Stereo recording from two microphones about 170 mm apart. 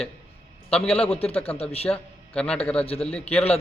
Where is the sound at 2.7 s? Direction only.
35° left (ahead or behind).